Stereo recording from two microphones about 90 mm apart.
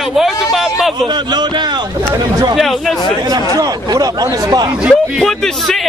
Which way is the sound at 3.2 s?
45° right (ahead or behind).